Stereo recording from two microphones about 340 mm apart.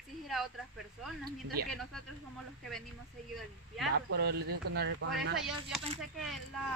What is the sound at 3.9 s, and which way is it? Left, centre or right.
Speech, right.